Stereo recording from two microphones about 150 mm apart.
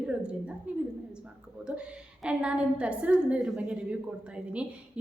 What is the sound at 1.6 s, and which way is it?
A woman's voice, 5° right (ahead or behind).